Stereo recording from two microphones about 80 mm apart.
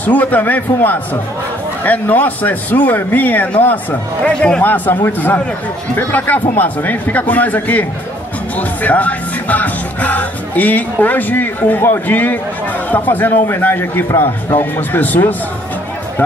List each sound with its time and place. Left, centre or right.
0.0 s a man's voice: left
4.6 s a man's voice: left